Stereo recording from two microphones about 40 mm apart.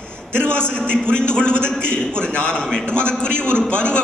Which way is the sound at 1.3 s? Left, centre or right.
Left.